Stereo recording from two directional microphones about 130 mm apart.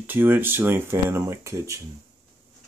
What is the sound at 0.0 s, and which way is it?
Speech, 15° right (ahead or behind).